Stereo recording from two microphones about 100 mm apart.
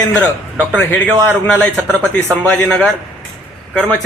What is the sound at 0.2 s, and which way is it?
A man's voice, 15° left (ahead or behind).